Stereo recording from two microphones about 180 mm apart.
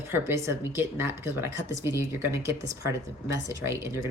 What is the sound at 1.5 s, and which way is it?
Speech, 90° left.